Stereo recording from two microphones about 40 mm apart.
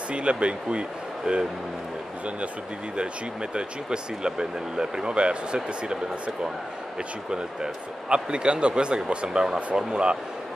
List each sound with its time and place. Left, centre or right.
0.1 s speech: right
3.5 s speech: right